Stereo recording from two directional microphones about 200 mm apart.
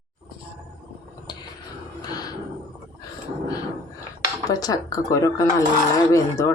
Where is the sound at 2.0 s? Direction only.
20° left (ahead or behind).